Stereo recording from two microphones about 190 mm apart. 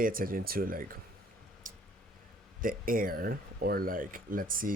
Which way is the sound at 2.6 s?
45° right (ahead or behind).